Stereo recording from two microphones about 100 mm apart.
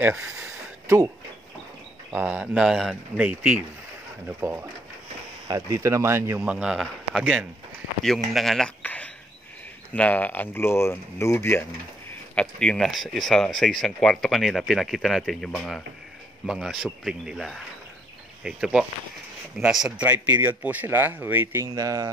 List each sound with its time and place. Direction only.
0.1 s a man's voice: 10° right (ahead or behind)
0.8 s speech: 25° right (ahead or behind)
2.1 s a man's voice: 10° right (ahead or behind)
3.2 s a man's voice: 15° right (ahead or behind)
6.4 s a man's voice: 10° right (ahead or behind)
8.8 s a sound: 15° left (ahead or behind)
9.9 s speech: 15° left (ahead or behind)
12.1 s a man's voice: 10° left (ahead or behind)
20.4 s speech: 15° right (ahead or behind)
21.7 s speech: 35° right (ahead or behind)